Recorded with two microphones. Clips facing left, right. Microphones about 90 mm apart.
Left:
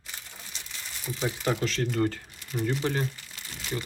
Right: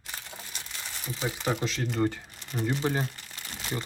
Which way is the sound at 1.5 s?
10° right (ahead or behind).